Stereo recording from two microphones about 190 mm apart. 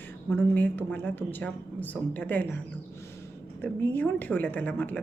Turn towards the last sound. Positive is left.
turn(degrees=10)  # may be behind; listen again after turning